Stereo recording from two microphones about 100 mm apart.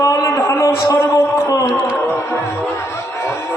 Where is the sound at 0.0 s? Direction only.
30° left (ahead or behind).